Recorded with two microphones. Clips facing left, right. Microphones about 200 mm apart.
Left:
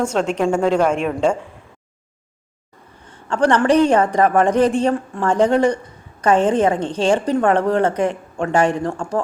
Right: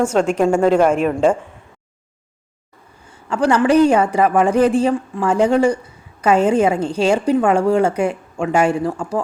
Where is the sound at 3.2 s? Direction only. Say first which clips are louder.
Even; 5° right (ahead or behind).